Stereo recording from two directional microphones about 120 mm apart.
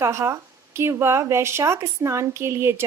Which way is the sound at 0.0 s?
25° right (ahead or behind).